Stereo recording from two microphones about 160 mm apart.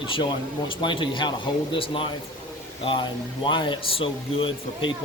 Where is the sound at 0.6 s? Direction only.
30° left (ahead or behind).